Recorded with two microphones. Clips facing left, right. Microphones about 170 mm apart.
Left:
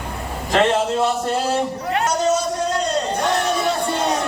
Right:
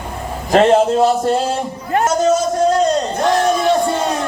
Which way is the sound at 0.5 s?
40° right (ahead or behind).